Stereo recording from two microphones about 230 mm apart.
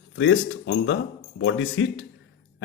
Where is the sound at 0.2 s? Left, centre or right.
Left.